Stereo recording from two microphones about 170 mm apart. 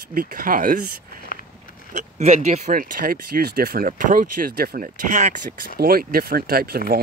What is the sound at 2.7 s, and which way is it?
Speech, 55° right (ahead or behind).